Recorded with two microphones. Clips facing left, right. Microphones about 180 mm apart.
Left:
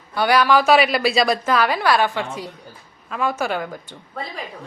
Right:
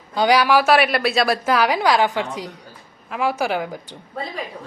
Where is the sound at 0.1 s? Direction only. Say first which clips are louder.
Right 1 dB; 15° right (ahead or behind).